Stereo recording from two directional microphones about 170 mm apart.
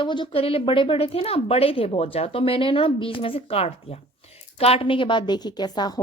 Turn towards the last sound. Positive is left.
turn(degrees=25)  # may be behind; listen again after turning